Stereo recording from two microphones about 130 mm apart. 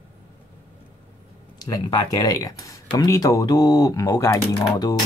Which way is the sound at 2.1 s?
30° left (ahead or behind).